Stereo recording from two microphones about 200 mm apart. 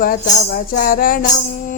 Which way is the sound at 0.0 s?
45° left (ahead or behind).